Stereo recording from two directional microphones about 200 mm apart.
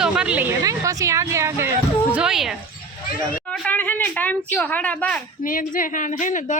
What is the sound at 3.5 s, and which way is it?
Speech, 5° left (ahead or behind).